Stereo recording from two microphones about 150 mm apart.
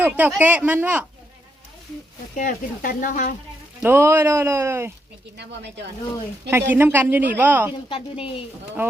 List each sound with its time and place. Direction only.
0.0 s speech: 10° right (ahead or behind)
2.3 s speech: 60° left (ahead or behind)
3.8 s speech: 15° right (ahead or behind)
6.5 s speech: 15° right (ahead or behind)
7.7 s a woman's voice: 35° left (ahead or behind)